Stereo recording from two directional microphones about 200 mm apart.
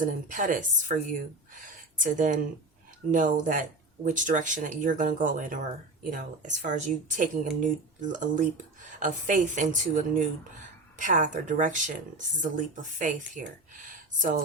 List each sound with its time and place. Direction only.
0.0 s speech: 40° right (ahead or behind)